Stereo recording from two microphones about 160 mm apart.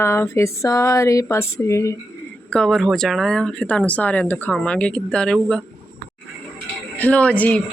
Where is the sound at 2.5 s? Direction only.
5° left (ahead or behind).